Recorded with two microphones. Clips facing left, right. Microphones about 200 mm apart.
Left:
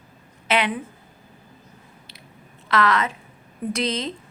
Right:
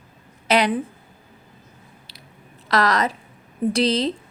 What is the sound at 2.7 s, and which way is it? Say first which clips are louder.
A woman's voice: right 1 dB; 40° right (ahead or behind).